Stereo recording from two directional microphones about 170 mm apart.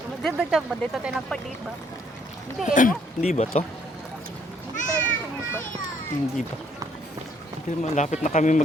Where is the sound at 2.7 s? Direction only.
50° left (ahead or behind).